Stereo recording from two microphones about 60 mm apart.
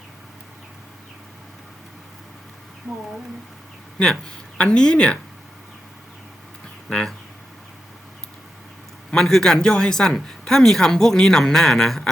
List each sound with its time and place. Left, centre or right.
3.9 s speech: centre
6.9 s speech: centre
9.0 s speech: centre